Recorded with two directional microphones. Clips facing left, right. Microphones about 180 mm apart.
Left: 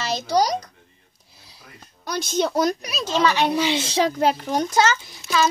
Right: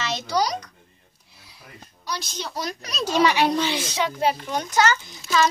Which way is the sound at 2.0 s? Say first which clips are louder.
Left 9 dB; 50° left (ahead or behind).